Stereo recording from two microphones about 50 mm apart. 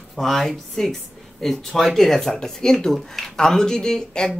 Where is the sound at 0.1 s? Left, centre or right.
Centre.